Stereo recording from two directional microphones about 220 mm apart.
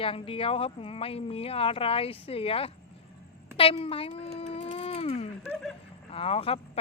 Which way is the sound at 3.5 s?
25° left (ahead or behind).